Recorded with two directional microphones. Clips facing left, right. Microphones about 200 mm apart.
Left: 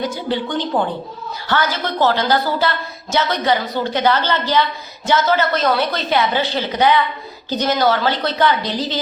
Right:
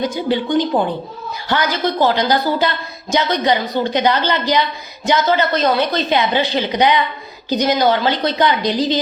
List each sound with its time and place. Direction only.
0.0 s a woman's voice: 15° right (ahead or behind)